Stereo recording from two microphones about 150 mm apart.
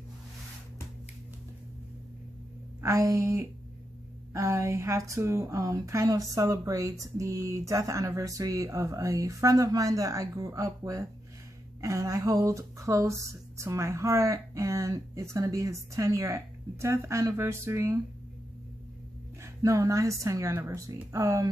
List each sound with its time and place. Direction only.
2.8 s a woman's voice: 20° right (ahead or behind)
19.4 s a woman's voice: 20° right (ahead or behind)